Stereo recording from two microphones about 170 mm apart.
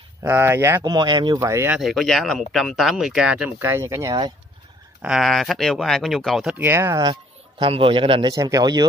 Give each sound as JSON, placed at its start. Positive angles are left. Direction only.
{"t": 0.2, "sound": "speech", "side_deg": -15}
{"t": 0.9, "sound": "speech", "side_deg": -25}
{"t": 1.8, "sound": "speech", "side_deg": 0}
{"t": 5.0, "sound": "speech", "side_deg": 0}
{"t": 6.6, "sound": "speech", "side_deg": -15}